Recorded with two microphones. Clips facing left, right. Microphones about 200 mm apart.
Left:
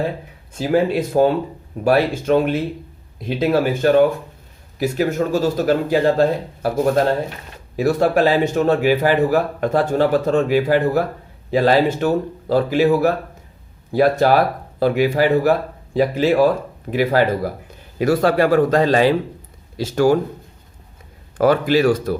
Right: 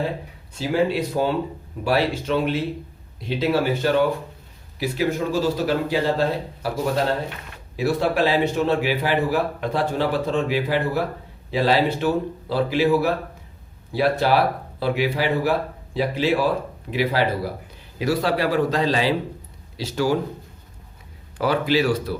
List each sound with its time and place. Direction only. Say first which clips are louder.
0.6 s a man's voice: left 4 dB; 50° left (ahead or behind)
21.3 s a man's voice: left 5 dB; 50° left (ahead or behind)